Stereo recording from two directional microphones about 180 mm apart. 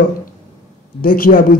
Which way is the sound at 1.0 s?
55° left (ahead or behind).